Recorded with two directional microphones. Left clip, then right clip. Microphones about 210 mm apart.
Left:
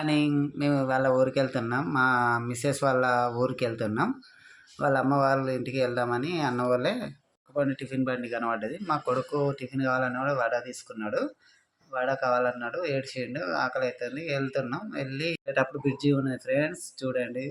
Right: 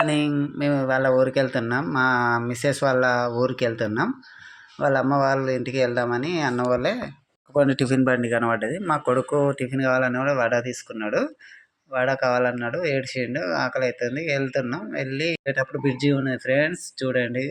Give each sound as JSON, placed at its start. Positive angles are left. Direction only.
{"t": 0.0, "sound": "speech", "side_deg": -10}
{"t": 7.5, "sound": "speech", "side_deg": -40}
{"t": 8.1, "sound": "speech", "side_deg": -20}